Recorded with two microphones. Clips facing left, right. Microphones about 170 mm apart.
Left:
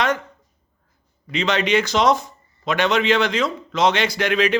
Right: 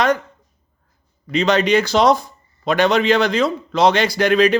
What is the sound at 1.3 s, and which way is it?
A man's voice, 40° right (ahead or behind).